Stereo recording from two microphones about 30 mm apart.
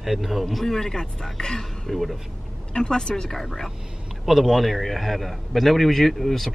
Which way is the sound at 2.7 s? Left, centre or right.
Left.